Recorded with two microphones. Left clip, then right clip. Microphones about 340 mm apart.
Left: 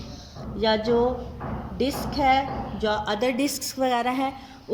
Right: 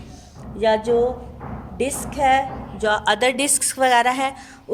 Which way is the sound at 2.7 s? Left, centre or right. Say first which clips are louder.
Right 6 dB; right.